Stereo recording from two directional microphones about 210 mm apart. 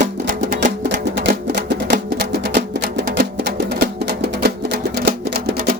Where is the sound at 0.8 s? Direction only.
55° right (ahead or behind).